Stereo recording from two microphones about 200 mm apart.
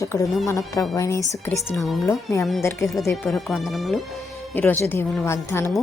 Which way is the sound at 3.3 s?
Centre (ahead or behind).